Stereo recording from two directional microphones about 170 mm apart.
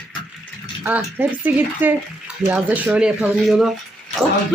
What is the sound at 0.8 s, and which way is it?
Speech, 10° right (ahead or behind).